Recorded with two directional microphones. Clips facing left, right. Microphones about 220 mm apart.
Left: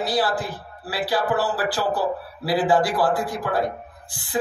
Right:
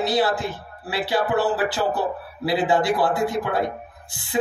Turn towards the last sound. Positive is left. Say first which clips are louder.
# right 2 dB
turn(degrees=-25)  # may be behind; listen again after turning